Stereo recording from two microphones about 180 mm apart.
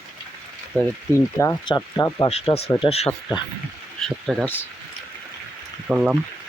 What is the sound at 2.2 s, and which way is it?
Speech, 35° left (ahead or behind).